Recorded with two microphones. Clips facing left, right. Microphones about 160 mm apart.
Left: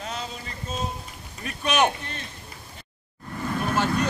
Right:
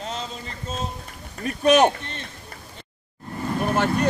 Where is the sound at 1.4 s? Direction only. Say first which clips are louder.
Right 7 dB; 40° right (ahead or behind).